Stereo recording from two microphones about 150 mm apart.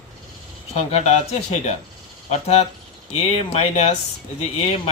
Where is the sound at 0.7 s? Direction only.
45° left (ahead or behind).